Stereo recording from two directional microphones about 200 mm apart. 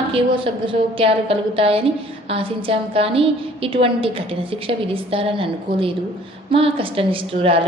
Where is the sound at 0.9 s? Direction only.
30° right (ahead or behind).